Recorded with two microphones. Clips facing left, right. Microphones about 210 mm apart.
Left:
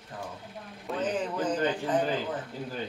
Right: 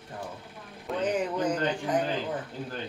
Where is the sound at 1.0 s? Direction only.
10° right (ahead or behind).